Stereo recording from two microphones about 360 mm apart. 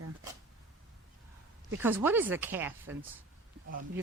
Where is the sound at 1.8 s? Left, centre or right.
Centre.